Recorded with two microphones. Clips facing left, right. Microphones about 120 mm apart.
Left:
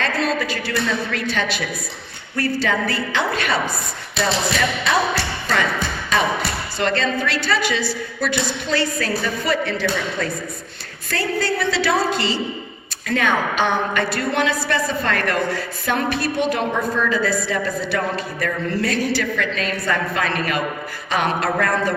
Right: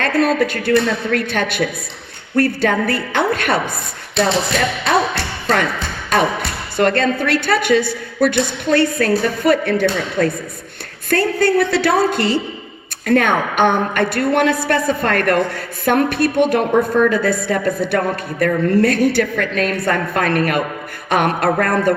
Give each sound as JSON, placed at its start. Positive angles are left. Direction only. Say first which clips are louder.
{"t": 0.0, "sound": "a woman's voice", "louder": "right 6 dB", "side_deg": -55}
{"t": 6.1, "sound": "a sound", "louder": "right 4 dB", "side_deg": -50}
{"t": 6.7, "sound": "a woman's voice", "louder": "right 6 dB", "side_deg": -55}